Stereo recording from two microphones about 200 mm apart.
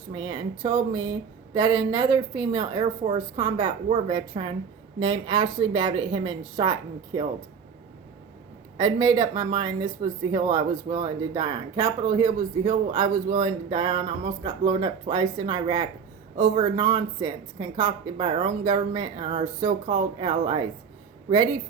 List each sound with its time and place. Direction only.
0.1 s speech: 25° right (ahead or behind)
8.8 s speech: 20° right (ahead or behind)